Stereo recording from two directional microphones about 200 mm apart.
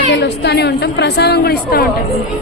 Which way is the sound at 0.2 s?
55° left (ahead or behind).